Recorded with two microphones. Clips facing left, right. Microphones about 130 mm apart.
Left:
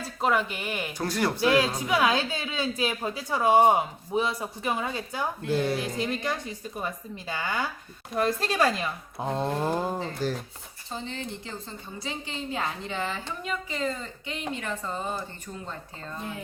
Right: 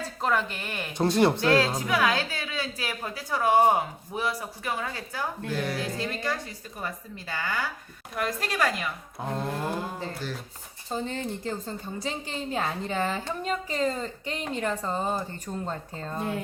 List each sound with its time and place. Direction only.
0.2 s speech: 10° left (ahead or behind)
0.9 s speech: 25° right (ahead or behind)
1.4 s a woman's voice: 15° left (ahead or behind)
9.6 s speech: 40° left (ahead or behind)
10.8 s a woman's voice: 45° right (ahead or behind)